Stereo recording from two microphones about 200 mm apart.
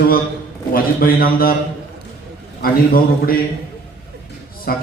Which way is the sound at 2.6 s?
45° left (ahead or behind).